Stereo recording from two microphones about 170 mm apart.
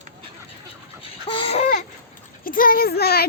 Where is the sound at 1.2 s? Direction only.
30° left (ahead or behind).